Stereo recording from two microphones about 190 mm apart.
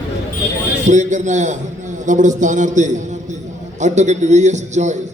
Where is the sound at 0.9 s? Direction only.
40° right (ahead or behind).